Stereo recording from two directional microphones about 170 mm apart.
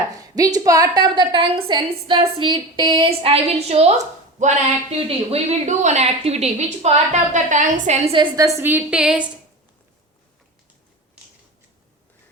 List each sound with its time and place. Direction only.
0.1 s a woman's voice: 20° right (ahead or behind); by 9.2 s 5° right (ahead or behind)